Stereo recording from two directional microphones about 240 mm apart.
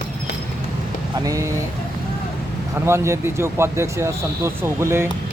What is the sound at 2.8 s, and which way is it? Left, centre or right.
Speech, centre.